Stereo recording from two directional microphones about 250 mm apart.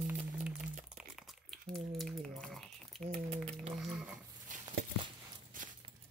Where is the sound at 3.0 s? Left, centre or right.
Right.